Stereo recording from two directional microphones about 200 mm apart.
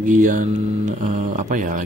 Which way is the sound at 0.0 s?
40° right (ahead or behind).